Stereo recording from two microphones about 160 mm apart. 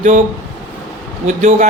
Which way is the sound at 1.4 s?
45° right (ahead or behind).